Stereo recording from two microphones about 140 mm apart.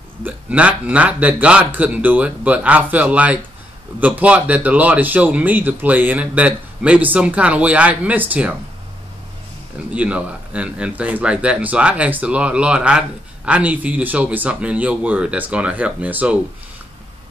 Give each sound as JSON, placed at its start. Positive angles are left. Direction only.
{"t": 0.2, "sound": "speech", "side_deg": -10}
{"t": 9.8, "sound": "speech", "side_deg": -10}